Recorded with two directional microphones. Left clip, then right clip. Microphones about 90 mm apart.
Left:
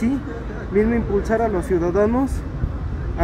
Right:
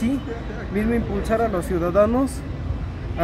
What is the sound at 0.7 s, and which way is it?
Speech, 25° right (ahead or behind).